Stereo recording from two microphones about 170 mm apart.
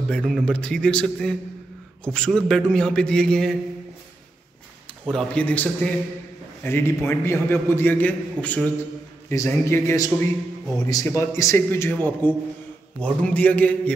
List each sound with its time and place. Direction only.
0.1 s a man's voice: 5° left (ahead or behind)
5.0 s a man's voice: 5° left (ahead or behind)